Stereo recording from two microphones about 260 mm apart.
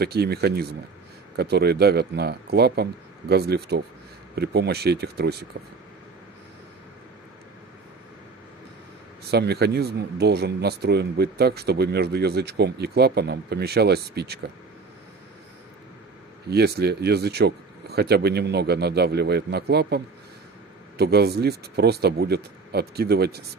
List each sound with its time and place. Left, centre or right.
0.0 s speech: right
9.3 s speech: right
16.4 s speech: right
21.0 s speech: right